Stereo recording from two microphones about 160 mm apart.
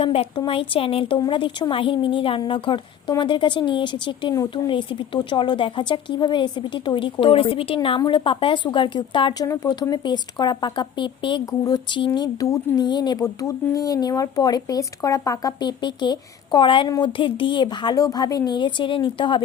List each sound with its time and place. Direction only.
0.0 s speech: 35° left (ahead or behind)